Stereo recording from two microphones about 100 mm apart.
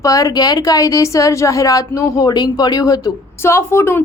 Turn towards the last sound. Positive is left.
turn(degrees=25)  # may be behind; listen again after turning